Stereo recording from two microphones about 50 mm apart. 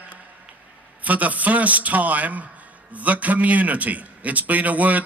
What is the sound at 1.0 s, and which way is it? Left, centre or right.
A man's voice, right.